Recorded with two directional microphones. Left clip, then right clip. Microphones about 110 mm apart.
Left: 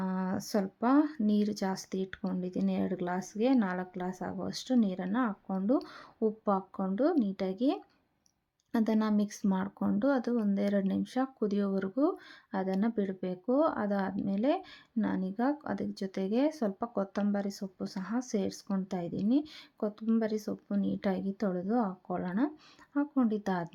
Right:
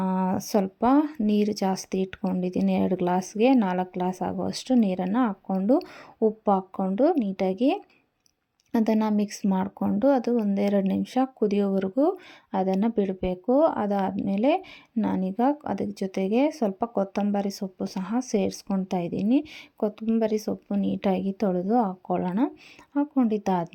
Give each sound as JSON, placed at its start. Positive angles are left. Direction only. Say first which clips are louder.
{"t": 0.0, "sound": "a woman's voice", "louder": "right 9 dB", "side_deg": -30}